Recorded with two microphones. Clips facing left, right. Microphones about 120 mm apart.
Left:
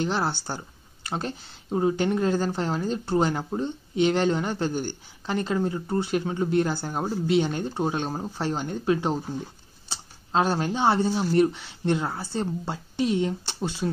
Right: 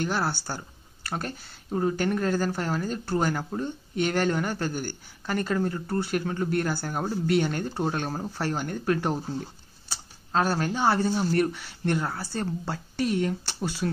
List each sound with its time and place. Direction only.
0.0 s speech: 25° left (ahead or behind)